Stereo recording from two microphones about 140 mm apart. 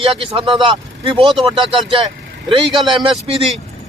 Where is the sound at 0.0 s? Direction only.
40° right (ahead or behind).